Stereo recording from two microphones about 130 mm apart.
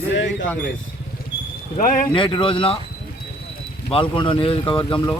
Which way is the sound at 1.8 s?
90° left.